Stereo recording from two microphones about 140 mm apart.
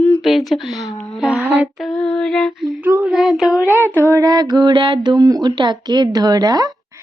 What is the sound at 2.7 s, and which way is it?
Female singing, 15° right (ahead or behind).